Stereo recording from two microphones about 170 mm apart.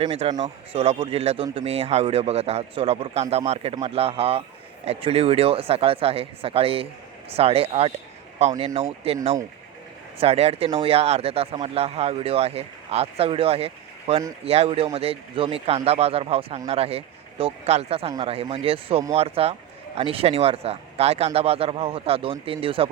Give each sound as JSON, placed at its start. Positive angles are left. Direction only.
{"t": 0.0, "sound": "speech", "side_deg": -40}